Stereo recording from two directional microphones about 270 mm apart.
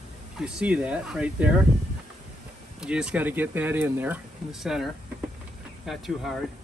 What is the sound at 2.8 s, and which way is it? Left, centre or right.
Speech, centre.